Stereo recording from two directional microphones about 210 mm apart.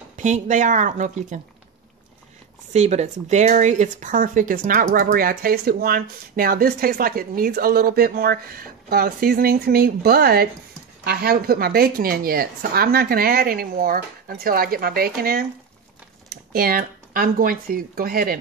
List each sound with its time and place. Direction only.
0.1 s speech: 35° right (ahead or behind)
2.7 s speech: 30° right (ahead or behind)